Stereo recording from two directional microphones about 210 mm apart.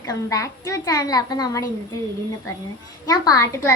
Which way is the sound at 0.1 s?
15° left (ahead or behind).